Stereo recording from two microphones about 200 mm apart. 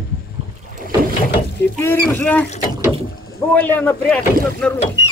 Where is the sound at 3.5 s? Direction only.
10° left (ahead or behind).